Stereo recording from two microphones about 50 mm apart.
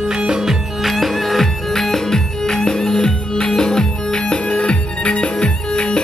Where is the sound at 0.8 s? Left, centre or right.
Centre.